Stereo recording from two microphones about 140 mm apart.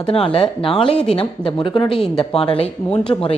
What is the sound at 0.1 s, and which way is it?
A woman's voice, 45° left (ahead or behind).